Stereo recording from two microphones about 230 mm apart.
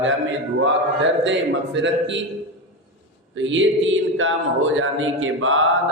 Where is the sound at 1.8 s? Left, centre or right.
Right.